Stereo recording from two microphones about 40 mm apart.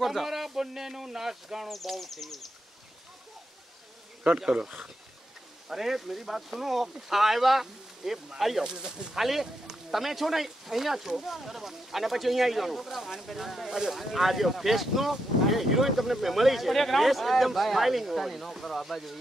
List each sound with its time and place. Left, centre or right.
0.0 s speech: centre
1.7 s speech: centre
4.4 s speech: right
5.7 s speech: centre
8.6 s speech: centre
9.1 s speech: centre